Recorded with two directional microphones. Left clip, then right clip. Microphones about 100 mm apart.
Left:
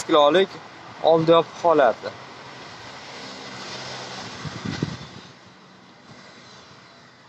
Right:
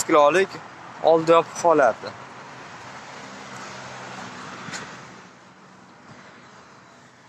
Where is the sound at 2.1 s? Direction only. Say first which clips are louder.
Left 1 dB; 35° left (ahead or behind).